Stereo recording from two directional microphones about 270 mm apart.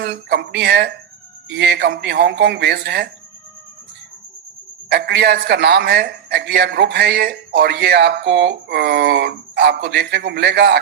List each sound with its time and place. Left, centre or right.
0.0 s a man's voice: right
4.9 s a man's voice: right